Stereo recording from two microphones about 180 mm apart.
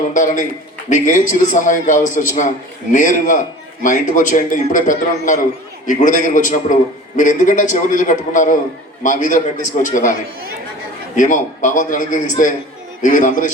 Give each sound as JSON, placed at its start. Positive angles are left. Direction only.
{"t": 0.1, "sound": "a man's voice", "side_deg": 45}
{"t": 11.2, "sound": "a man's voice", "side_deg": 45}